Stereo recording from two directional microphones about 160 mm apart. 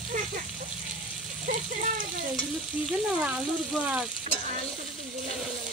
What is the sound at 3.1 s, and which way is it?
Speech, 5° right (ahead or behind).